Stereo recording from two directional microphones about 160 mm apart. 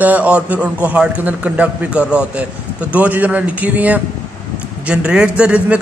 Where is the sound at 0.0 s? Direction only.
10° right (ahead or behind).